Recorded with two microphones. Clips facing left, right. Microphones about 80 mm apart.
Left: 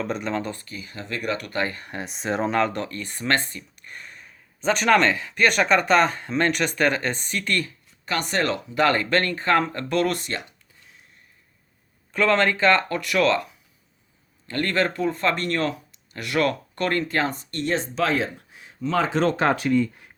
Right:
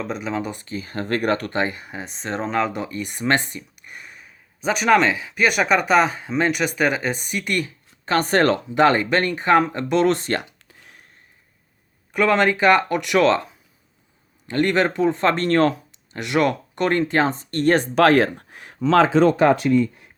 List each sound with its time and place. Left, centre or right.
0.0 s speech: centre
0.6 s speech: right
0.9 s speech: right
1.5 s speech: right
1.7 s speech: centre
8.0 s speech: right
8.7 s speech: right
10.7 s a sound: right
12.1 s speech: centre; by 15.7 s right
16.1 s speech: right
17.7 s speech: right